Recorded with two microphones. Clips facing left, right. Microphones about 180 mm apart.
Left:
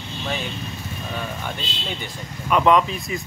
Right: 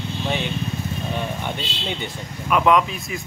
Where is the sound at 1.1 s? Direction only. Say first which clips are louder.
Right 1 dB; 20° right (ahead or behind).